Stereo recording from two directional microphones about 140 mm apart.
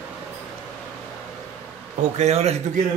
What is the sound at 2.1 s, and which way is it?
Speech, 50° right (ahead or behind).